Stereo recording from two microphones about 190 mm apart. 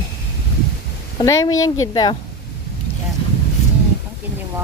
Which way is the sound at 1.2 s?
15° left (ahead or behind).